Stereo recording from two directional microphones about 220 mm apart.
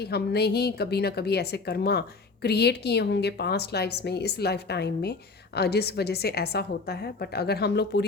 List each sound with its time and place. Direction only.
0.0 s a woman's voice: 45° left (ahead or behind)